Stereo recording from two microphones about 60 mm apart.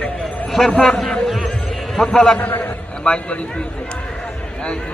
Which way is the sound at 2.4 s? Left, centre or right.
Left.